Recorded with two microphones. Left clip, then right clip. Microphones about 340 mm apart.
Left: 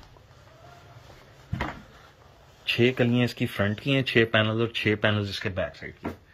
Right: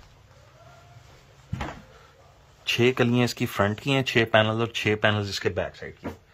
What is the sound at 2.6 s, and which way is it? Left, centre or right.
Speech, centre.